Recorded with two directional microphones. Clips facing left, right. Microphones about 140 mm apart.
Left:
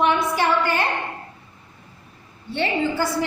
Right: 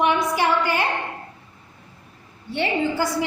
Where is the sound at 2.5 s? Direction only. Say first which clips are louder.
Even; 15° right (ahead or behind).